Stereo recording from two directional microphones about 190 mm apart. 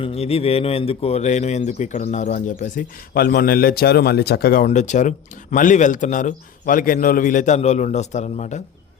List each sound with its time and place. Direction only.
0.0 s speech: 30° left (ahead or behind)